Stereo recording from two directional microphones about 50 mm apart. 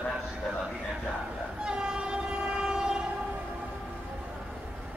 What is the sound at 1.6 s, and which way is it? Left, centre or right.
Train, centre.